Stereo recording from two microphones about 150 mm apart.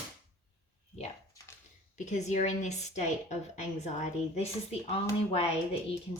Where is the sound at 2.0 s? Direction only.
50° left (ahead or behind).